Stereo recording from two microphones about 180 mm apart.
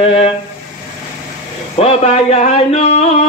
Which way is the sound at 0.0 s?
35° left (ahead or behind).